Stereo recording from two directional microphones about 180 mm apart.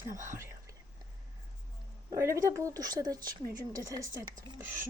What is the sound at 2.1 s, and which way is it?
Speech, 15° right (ahead or behind).